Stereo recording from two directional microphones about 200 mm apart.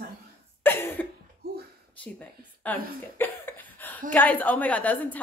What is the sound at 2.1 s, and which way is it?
Speech, 10° left (ahead or behind).